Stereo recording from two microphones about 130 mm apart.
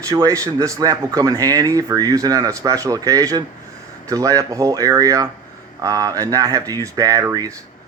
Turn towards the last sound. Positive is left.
turn(degrees=-25)  # may be behind; listen again after turning